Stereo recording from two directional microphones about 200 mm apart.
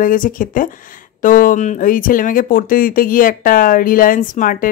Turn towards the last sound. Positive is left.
turn(degrees=40)  # may be behind; listen again after turning